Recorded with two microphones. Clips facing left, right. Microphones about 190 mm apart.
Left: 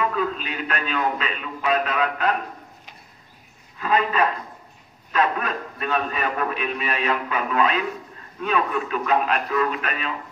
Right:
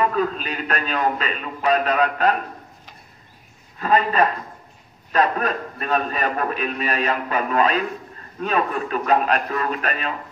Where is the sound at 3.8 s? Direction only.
40° right (ahead or behind).